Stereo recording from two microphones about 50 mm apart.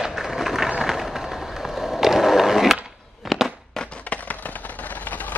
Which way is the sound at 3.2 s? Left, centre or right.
Centre.